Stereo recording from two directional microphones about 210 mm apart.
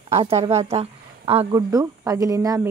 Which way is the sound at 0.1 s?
30° right (ahead or behind).